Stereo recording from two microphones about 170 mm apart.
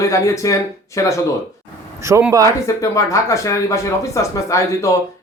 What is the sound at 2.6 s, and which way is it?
Speech, 15° left (ahead or behind).